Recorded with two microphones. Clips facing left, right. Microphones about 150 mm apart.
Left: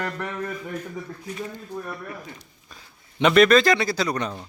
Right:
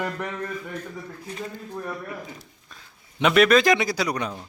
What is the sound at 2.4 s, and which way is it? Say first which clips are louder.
Speech: even; centre (ahead or behind).